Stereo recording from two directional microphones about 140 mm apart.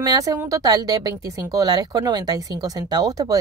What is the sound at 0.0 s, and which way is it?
Speech, 25° right (ahead or behind).